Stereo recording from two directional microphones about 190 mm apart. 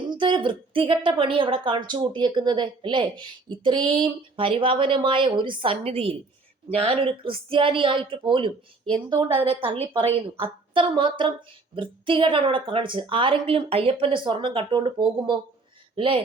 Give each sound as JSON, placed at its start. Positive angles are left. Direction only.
{"t": 0.1, "sound": "a woman's voice", "side_deg": -25}